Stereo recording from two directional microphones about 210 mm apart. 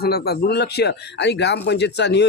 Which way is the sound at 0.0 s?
50° left (ahead or behind).